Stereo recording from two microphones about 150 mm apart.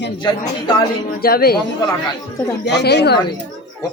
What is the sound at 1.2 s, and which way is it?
Speech, 90° left.